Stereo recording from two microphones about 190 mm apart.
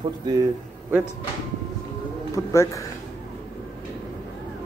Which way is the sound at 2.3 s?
15° left (ahead or behind).